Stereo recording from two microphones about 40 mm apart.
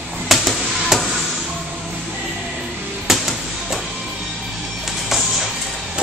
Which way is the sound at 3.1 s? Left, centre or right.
Centre.